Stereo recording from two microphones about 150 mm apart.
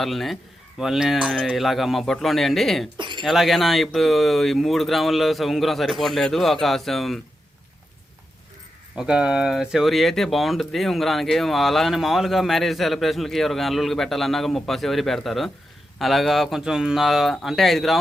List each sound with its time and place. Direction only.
0.0 s speech: centre (ahead or behind)
3.0 s a sound: 30° right (ahead or behind)
3.2 s speech: centre (ahead or behind)
9.0 s speech: 5° right (ahead or behind)